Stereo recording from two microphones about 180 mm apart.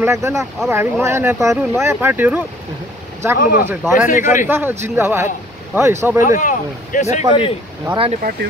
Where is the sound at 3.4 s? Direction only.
50° left (ahead or behind).